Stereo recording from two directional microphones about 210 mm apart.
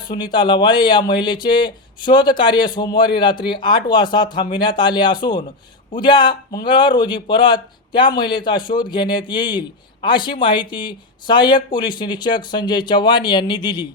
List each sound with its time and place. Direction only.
0.1 s speech: 20° left (ahead or behind)